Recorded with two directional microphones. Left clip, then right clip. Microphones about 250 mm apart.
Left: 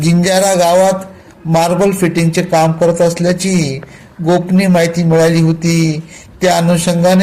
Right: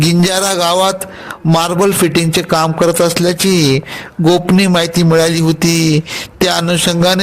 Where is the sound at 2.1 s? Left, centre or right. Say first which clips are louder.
Even; right.